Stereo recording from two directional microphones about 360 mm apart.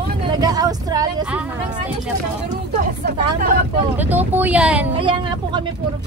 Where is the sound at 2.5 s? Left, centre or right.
Centre.